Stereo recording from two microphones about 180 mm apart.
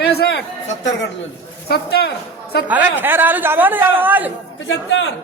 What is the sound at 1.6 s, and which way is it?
A woman's voice, 60° left (ahead or behind).